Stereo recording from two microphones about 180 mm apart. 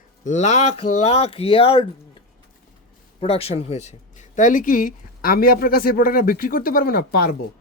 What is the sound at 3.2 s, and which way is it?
Speech, 35° left (ahead or behind).